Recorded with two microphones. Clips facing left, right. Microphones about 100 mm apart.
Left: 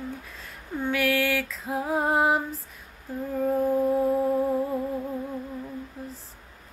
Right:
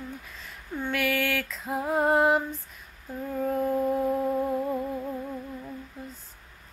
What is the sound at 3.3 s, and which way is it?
Music, 5° left (ahead or behind).